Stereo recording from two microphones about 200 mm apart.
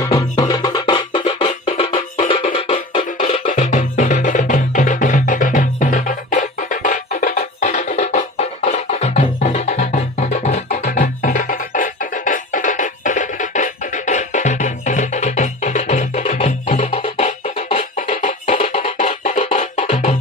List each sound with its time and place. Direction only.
0.0 s music: 20° left (ahead or behind); by 10.9 s 35° left (ahead or behind)
10.9 s music: 45° left (ahead or behind)